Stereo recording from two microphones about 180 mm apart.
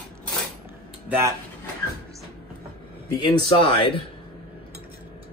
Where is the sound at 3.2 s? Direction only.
25° left (ahead or behind).